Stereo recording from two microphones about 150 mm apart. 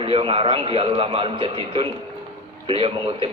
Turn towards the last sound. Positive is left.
turn(degrees=-35)  # may be behind; listen again after turning